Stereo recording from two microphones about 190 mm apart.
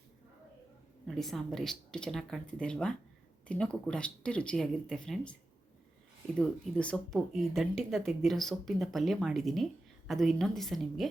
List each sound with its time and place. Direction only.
1.0 s speech: centre (ahead or behind)
6.4 s speech: 5° left (ahead or behind)